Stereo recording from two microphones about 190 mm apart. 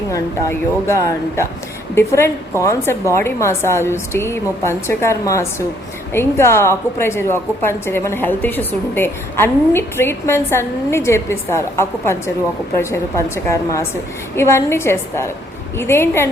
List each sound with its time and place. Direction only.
0.1 s a woman's voice: 15° left (ahead or behind)